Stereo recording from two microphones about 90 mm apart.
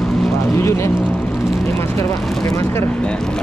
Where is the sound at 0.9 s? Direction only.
5° right (ahead or behind).